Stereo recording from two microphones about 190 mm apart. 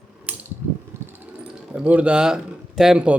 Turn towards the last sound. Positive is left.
turn(degrees=-5)  # may be behind; listen again after turning